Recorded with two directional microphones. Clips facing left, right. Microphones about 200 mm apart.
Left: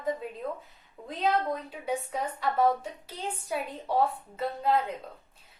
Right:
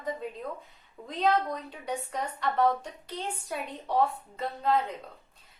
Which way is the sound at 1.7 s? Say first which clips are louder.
Left 2 dB; 5° left (ahead or behind).